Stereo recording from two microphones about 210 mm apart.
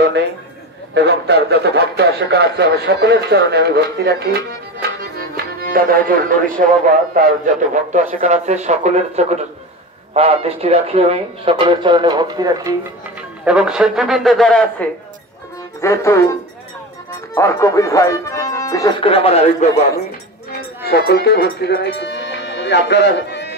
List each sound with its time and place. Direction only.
0.9 s speech: 50° right (ahead or behind)
5.3 s music: 45° right (ahead or behind)
6.6 s a man's voice: 40° right (ahead or behind); by 12.7 s 20° right (ahead or behind)
13.5 s a man's voice: 5° right (ahead or behind); by 19.7 s 30° left (ahead or behind)
20.8 s speech: 50° left (ahead or behind)